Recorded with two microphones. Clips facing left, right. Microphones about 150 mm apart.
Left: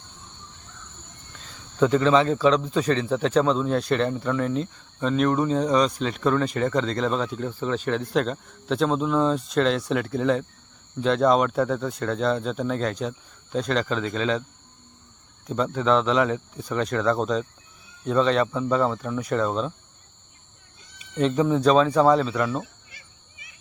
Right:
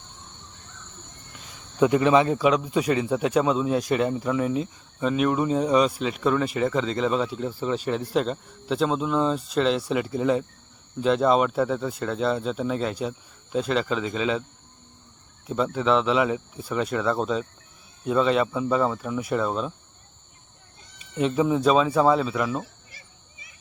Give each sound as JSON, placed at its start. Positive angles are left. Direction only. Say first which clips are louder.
{"t": 1.4, "sound": "a man's voice", "louder": "even", "side_deg": -10}
{"t": 15.4, "sound": "a man's voice", "louder": "even", "side_deg": -5}
{"t": 21.2, "sound": "a man's voice", "louder": "left 1 dB", "side_deg": -5}